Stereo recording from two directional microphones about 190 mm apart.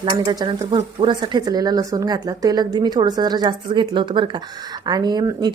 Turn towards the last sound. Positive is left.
turn(degrees=-20)  # may be behind; listen again after turning